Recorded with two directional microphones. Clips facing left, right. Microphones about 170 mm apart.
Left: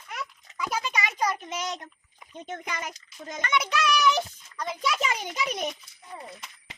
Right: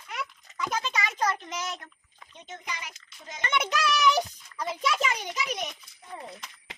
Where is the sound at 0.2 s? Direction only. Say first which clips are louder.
Right 1 dB; centre (ahead or behind); by 2.3 s 15° left (ahead or behind).